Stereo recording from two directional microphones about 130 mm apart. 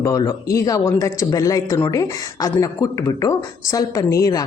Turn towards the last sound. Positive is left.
turn(degrees=25)  # may be behind; listen again after turning